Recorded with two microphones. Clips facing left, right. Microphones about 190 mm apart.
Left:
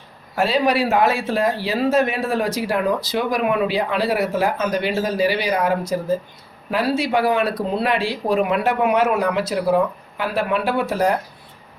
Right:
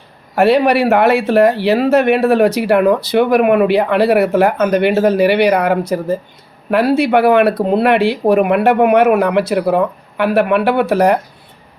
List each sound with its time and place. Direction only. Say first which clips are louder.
0.3 s speech: right 7 dB; 65° right (ahead or behind)